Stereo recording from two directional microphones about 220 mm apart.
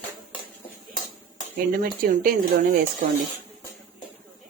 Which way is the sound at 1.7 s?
40° right (ahead or behind).